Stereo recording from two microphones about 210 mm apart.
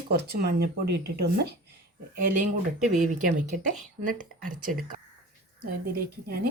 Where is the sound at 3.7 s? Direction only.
40° right (ahead or behind).